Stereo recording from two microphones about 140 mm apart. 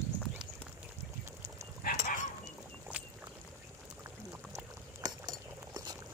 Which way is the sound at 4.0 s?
20° right (ahead or behind).